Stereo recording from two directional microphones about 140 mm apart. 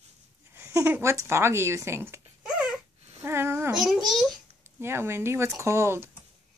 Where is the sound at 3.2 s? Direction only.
15° right (ahead or behind).